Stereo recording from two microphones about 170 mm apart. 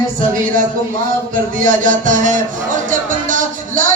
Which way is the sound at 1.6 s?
50° right (ahead or behind).